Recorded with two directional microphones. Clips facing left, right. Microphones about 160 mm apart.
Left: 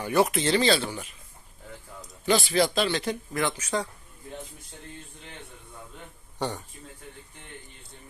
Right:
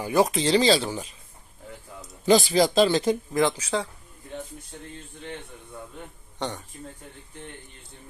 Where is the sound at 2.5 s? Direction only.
35° right (ahead or behind).